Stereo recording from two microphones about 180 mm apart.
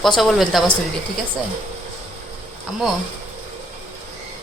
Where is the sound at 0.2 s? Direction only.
Centre (ahead or behind).